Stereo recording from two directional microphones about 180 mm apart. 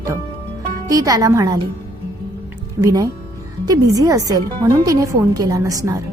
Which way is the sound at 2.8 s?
20° right (ahead or behind).